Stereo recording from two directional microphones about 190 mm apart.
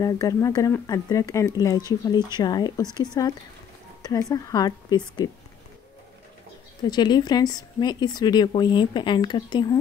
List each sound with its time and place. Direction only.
0.0 s speech: 15° left (ahead or behind)
6.9 s speech: 20° left (ahead or behind)